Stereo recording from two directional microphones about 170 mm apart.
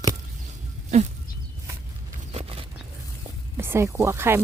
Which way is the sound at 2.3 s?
35° right (ahead or behind).